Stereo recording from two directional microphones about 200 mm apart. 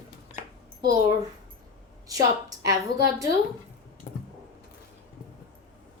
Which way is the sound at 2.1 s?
20° right (ahead or behind).